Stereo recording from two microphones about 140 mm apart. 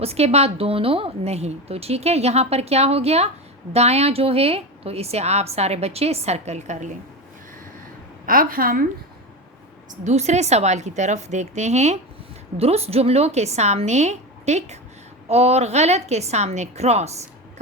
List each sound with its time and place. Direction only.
0.0 s a woman's voice: 45° right (ahead or behind)
8.3 s a woman's voice: 90° right
10.0 s a woman's voice: 55° right (ahead or behind)